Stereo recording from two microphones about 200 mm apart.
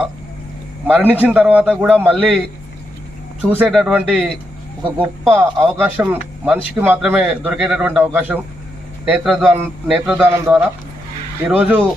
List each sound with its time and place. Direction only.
0.9 s a man's voice: 10° right (ahead or behind)
3.4 s a man's voice: 10° right (ahead or behind)